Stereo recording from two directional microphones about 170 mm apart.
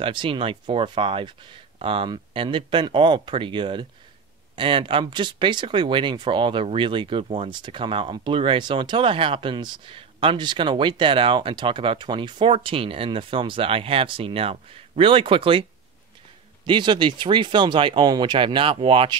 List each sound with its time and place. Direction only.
0.0 s speech: 30° right (ahead or behind)
16.6 s speech: 25° right (ahead or behind)